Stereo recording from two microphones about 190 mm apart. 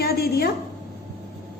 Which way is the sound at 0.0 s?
55° left (ahead or behind).